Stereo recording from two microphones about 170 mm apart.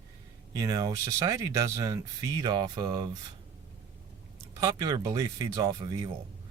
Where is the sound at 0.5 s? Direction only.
20° right (ahead or behind).